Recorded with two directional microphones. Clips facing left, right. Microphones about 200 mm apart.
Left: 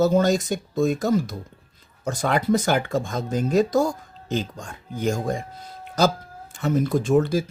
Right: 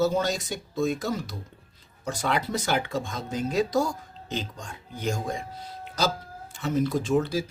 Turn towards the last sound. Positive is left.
turn(degrees=50)  # may be behind; listen again after turning